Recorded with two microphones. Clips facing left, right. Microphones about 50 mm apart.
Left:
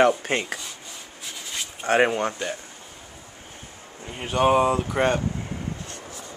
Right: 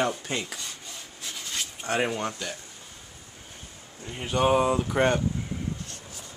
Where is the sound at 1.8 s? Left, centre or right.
Left.